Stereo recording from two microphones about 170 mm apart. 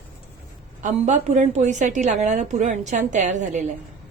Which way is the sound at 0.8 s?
40° right (ahead or behind).